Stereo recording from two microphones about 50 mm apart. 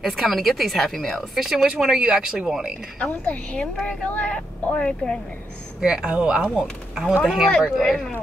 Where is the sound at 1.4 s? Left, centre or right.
Centre.